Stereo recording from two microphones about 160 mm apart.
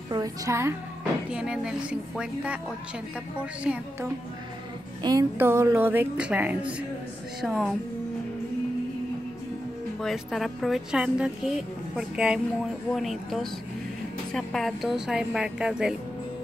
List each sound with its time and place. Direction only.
0.1 s a woman's voice: 20° right (ahead or behind)
1.3 s a woman's voice: 5° right (ahead or behind)
5.0 s a woman's voice: 20° right (ahead or behind); by 7.7 s centre (ahead or behind)
9.9 s speech: centre (ahead or behind)